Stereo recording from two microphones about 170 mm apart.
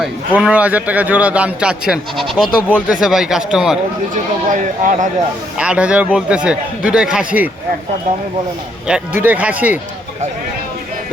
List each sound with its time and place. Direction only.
0.0 s a man's voice: 5° right (ahead or behind)
4.1 s speech: 50° right (ahead or behind)
5.5 s a man's voice: 5° right (ahead or behind)
8.9 s a man's voice: 10° right (ahead or behind)